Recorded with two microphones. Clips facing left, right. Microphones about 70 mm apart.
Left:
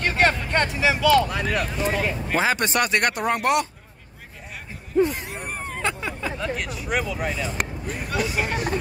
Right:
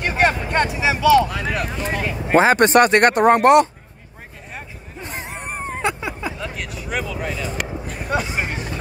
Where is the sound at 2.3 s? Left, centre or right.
Right.